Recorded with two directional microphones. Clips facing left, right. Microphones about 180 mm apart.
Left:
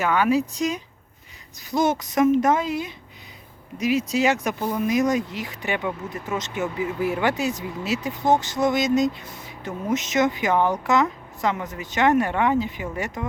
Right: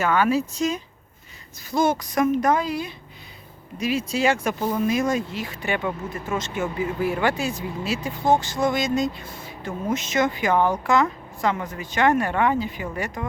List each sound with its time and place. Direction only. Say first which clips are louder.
0.0 s speech: even; 15° left (ahead or behind)